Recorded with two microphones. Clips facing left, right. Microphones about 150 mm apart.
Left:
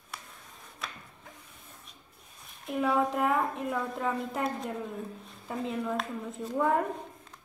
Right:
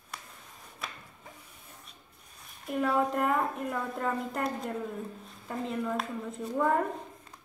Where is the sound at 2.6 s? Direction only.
Centre (ahead or behind).